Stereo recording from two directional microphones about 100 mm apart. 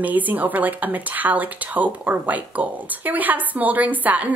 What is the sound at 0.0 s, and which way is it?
Speech, 15° right (ahead or behind).